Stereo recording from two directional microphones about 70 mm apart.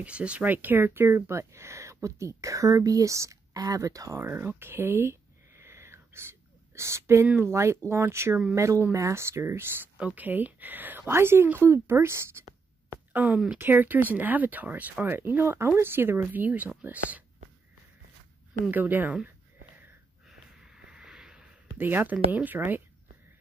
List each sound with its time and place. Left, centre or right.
0.0 s speech: centre; by 4.2 s right
4.2 s a sound: right
7.5 s speech: right
9.9 s speech: right
12.9 s a sound: right
13.6 s speech: right
18.7 s speech: right
20.2 s a sound: centre
21.7 s speech: right